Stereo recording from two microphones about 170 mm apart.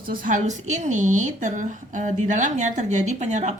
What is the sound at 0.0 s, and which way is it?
A woman's voice, 55° right (ahead or behind).